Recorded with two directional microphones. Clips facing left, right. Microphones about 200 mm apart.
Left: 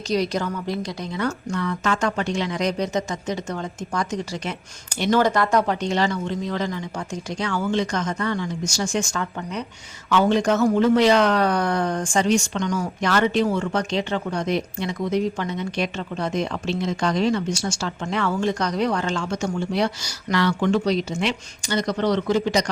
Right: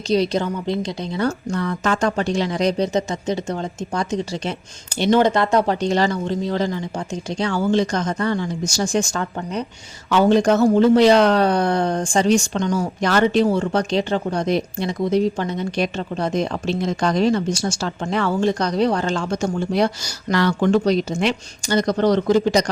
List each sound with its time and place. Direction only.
0.1 s speech: 30° right (ahead or behind)